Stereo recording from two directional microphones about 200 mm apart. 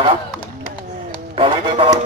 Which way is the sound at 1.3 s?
25° right (ahead or behind).